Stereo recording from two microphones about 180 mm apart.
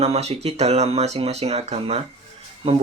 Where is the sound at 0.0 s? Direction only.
35° right (ahead or behind).